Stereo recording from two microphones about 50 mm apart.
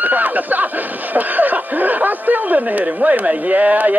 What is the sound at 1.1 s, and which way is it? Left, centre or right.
Speech, right.